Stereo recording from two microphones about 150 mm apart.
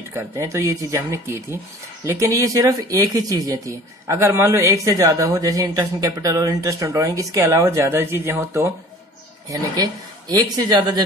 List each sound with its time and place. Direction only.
0.1 s speech: 15° right (ahead or behind)
10.3 s speech: 25° right (ahead or behind)